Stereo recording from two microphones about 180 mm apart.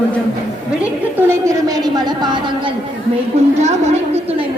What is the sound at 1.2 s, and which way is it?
Speech, 15° right (ahead or behind).